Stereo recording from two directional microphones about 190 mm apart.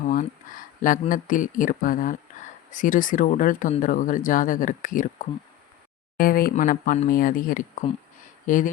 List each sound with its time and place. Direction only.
0.0 s speech: 45° left (ahead or behind)